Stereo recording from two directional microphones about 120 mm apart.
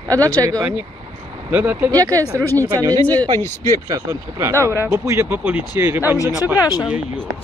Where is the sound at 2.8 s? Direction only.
30° right (ahead or behind); by 6.1 s 15° right (ahead or behind).